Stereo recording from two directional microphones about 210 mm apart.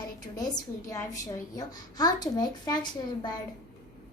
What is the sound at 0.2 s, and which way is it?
A woman's voice, 20° left (ahead or behind).